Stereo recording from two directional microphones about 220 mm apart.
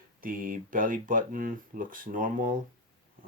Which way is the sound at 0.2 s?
40° right (ahead or behind).